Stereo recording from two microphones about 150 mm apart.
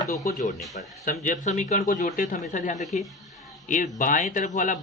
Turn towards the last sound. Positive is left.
turn(degrees=55)  # may be behind; listen again after turning